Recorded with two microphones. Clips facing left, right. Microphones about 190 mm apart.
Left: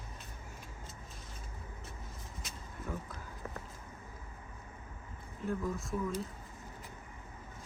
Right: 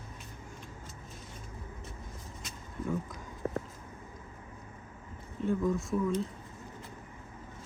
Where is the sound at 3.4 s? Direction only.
35° right (ahead or behind).